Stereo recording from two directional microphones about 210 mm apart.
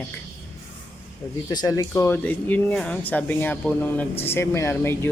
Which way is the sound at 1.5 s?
15° left (ahead or behind).